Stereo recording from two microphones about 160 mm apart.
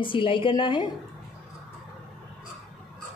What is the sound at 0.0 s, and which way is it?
Speech, 30° left (ahead or behind).